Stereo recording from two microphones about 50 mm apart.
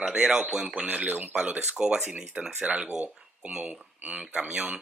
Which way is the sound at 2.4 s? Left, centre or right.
Right.